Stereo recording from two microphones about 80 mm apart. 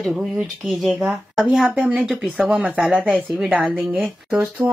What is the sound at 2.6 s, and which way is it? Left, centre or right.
Speech, centre.